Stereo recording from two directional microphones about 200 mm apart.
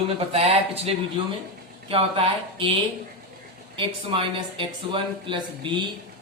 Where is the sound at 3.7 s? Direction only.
25° right (ahead or behind).